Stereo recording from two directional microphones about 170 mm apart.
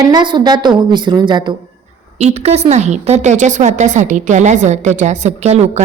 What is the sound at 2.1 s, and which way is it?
A woman's voice, 40° right (ahead or behind).